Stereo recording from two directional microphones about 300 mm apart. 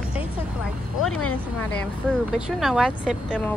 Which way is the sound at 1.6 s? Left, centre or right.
Centre.